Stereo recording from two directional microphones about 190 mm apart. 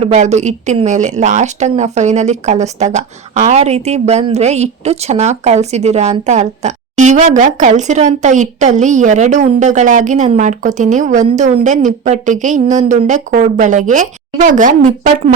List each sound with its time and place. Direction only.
0.0 s speech: 35° right (ahead or behind)